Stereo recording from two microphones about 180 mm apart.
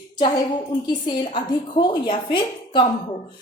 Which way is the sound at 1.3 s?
25° left (ahead or behind).